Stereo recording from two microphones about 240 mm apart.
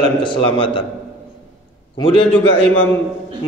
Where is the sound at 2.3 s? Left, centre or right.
Centre.